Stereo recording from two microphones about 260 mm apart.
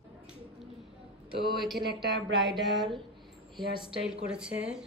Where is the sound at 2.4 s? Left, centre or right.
Centre.